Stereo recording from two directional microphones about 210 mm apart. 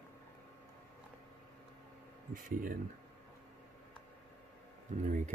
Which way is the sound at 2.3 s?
40° right (ahead or behind).